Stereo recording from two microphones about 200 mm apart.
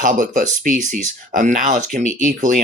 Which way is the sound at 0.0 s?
40° right (ahead or behind).